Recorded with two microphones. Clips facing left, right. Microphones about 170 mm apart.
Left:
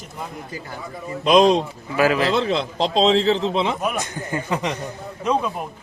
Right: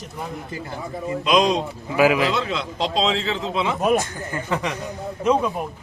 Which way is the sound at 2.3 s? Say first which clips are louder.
Left 4 dB; 35° left (ahead or behind).